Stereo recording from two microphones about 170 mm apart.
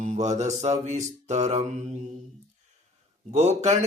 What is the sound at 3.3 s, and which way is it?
Mantra, 40° right (ahead or behind).